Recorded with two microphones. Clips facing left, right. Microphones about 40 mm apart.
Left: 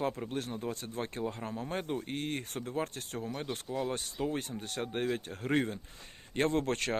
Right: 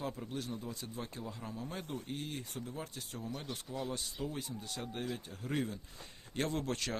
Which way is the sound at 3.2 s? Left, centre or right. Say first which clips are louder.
Left 5 dB; left.